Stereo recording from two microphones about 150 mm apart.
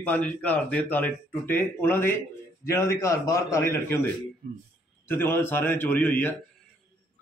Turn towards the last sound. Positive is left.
turn(degrees=15)  # may be behind; listen again after turning